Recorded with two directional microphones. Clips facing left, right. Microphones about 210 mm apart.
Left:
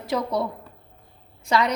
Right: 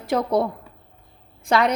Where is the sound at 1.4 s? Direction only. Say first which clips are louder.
Right 3 dB; 55° right (ahead or behind).